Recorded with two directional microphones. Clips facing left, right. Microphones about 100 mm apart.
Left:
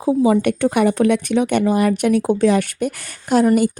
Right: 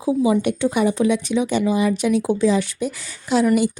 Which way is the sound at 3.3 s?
45° left (ahead or behind).